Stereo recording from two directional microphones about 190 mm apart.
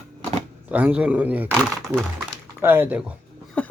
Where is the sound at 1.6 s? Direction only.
5° left (ahead or behind).